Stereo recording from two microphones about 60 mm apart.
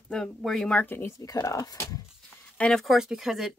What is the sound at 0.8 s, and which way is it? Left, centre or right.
Speech, left.